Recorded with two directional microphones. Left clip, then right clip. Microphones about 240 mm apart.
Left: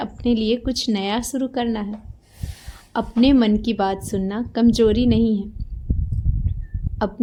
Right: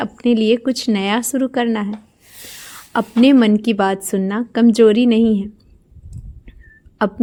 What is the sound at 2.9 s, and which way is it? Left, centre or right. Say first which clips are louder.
A woman's voice: right 4 dB; right.